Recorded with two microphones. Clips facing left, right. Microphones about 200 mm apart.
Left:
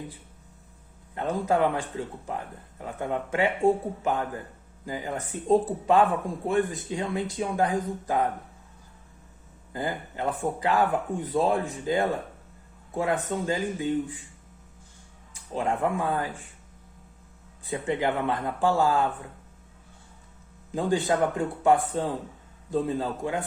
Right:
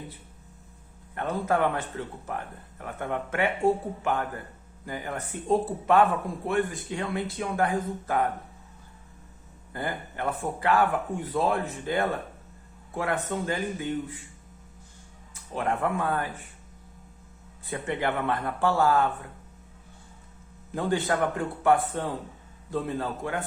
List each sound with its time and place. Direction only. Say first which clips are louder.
1.1 s speech: left 1 dB; 15° left (ahead or behind)
9.7 s speech: left 2 dB; 15° left (ahead or behind)
15.7 s speech: even; 15° left (ahead or behind)
18.0 s speech: right 2 dB; 15° left (ahead or behind)
20.7 s speech: left 2 dB; 15° left (ahead or behind)